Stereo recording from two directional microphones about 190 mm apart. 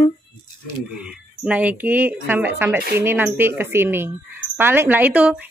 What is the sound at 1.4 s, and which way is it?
A woman's voice, 10° right (ahead or behind).